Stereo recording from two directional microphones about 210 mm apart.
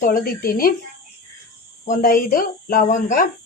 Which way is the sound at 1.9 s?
40° left (ahead or behind).